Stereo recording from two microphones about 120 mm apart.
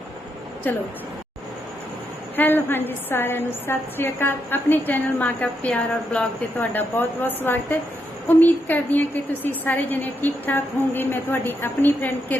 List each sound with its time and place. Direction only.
2.3 s a woman's voice: 15° left (ahead or behind)